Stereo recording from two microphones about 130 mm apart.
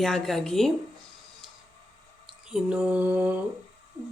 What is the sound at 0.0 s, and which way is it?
Speech, centre (ahead or behind).